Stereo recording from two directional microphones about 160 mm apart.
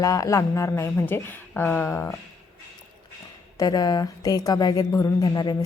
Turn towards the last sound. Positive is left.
turn(degrees=25)  # may be behind; listen again after turning